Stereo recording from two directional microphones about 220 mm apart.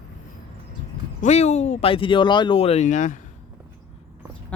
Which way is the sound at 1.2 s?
30° left (ahead or behind).